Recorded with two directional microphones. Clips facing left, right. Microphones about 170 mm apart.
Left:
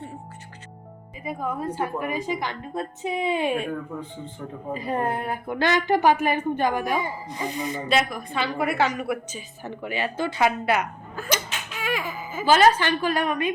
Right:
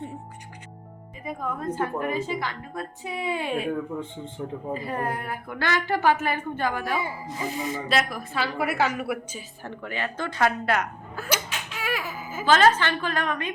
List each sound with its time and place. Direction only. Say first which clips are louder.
1.2 s a woman's voice: left 2 dB; 5° left (ahead or behind); by 3.5 s 20° left (ahead or behind)
4.7 s a woman's voice: left 5 dB; 20° left (ahead or behind)
7.0 s a woman's voice: left 1 dB; 5° right (ahead or behind)
9.8 s a woman's voice: left 4 dB; 10° left (ahead or behind)
11.2 s a sound: left 1 dB; 10° right (ahead or behind)
12.5 s a woman's voice: left 2 dB; 10° left (ahead or behind)